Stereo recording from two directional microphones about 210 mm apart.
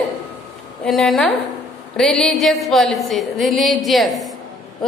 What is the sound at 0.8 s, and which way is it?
A woman's voice, centre (ahead or behind).